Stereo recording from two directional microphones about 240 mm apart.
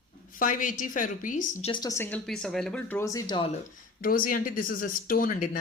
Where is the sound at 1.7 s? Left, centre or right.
Centre.